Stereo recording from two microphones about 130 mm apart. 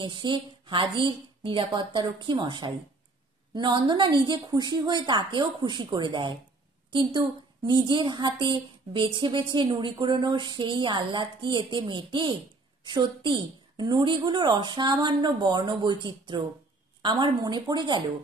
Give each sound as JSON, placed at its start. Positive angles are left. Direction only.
{"t": 0.0, "sound": "a woman's voice", "side_deg": -40}